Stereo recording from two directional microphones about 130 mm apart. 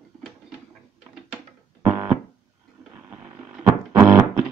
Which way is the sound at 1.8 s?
15° right (ahead or behind).